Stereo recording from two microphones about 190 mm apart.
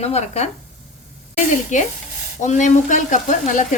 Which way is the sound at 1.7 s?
40° left (ahead or behind).